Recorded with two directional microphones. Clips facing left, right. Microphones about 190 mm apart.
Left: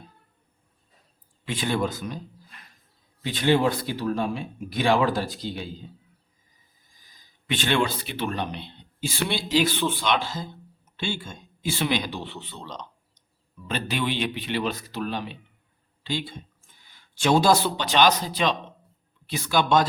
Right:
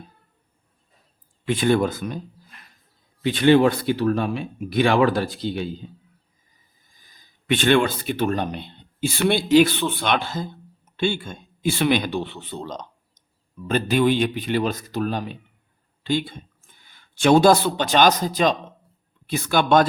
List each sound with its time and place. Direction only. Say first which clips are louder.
1.5 s speech: right 7 dB; 55° right (ahead or behind)
3.2 s speech: right 6 dB; 65° right (ahead or behind)
7.4 s speech: right 6 dB; 55° right (ahead or behind)
16.0 s a sound: right 7 dB; 55° right (ahead or behind)
17.7 s speech: right 3 dB; 45° right (ahead or behind)